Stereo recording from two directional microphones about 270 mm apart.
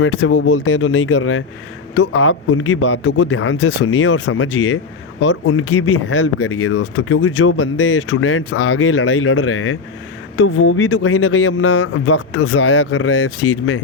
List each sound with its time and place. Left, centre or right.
0.0 s speech: left